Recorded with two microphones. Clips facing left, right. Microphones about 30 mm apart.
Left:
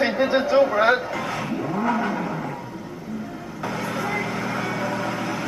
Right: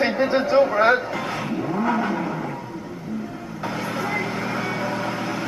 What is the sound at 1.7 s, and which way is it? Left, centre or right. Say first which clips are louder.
Vehicle: right 1 dB; centre.